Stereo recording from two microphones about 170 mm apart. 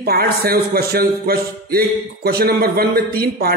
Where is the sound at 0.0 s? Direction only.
65° right (ahead or behind).